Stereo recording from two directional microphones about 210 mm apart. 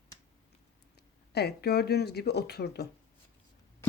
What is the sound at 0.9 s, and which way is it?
Speech, 50° left (ahead or behind).